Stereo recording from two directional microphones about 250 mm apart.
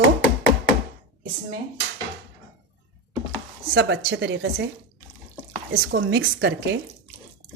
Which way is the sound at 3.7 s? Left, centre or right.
Right.